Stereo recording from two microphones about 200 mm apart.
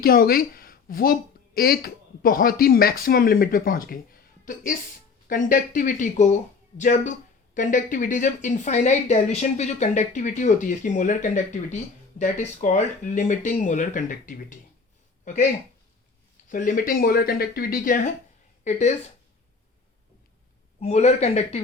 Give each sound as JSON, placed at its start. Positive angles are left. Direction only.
{"t": 0.0, "sound": "a woman's voice", "side_deg": 50}
{"t": 16.5, "sound": "a woman's voice", "side_deg": 40}
{"t": 20.8, "sound": "a woman's voice", "side_deg": 35}